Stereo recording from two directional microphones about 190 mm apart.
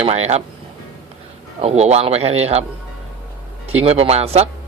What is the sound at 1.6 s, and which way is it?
Speech, 35° right (ahead or behind).